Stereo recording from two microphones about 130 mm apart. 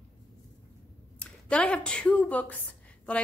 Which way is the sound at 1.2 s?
10° left (ahead or behind).